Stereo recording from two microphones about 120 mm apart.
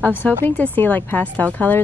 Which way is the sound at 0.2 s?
15° left (ahead or behind).